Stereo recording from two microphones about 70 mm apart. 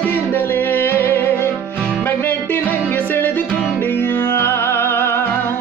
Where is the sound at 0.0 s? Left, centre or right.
Left.